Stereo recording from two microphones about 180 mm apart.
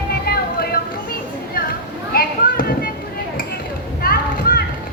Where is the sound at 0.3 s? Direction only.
60° left (ahead or behind).